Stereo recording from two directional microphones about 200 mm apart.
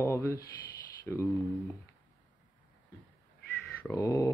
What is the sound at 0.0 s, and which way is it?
Speech, 15° left (ahead or behind).